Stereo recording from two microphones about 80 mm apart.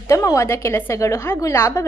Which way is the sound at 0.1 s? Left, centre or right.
Left.